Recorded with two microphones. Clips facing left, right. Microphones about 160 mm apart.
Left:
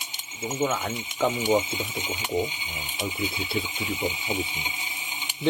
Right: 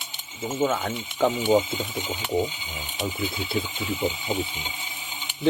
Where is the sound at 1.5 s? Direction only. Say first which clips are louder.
Right 3 dB; 20° left (ahead or behind).